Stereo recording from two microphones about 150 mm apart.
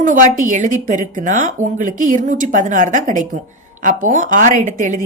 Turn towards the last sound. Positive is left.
turn(degrees=-60)  # may be behind; listen again after turning